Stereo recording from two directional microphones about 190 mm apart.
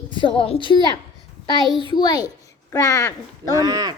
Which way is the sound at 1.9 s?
20° left (ahead or behind).